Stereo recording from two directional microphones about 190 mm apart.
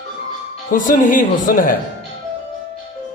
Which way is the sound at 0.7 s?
45° left (ahead or behind).